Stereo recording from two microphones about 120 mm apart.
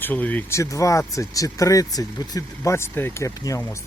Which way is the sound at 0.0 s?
15° left (ahead or behind).